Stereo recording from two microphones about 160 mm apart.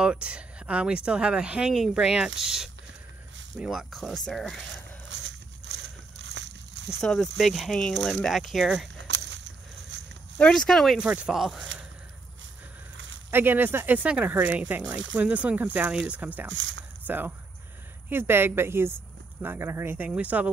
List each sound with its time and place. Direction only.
0.0 s speech: 5° right (ahead or behind)
5.7 s vehicle: 90° right
6.2 s a sound: 90° right
7.0 s speech: centre (ahead or behind)
9.1 s a sound: 90° right
10.3 s speech: 5° left (ahead or behind)
13.3 s speech: 15° right (ahead or behind)